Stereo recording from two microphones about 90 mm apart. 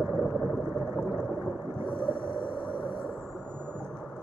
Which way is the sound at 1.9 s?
65° left (ahead or behind).